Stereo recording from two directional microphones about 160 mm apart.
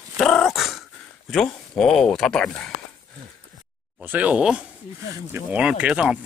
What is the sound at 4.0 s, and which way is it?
Speech, 10° right (ahead or behind).